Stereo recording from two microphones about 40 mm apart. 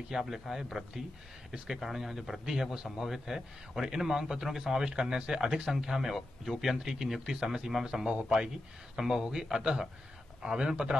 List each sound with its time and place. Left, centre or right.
0.1 s a man's voice: centre; by 11.0 s right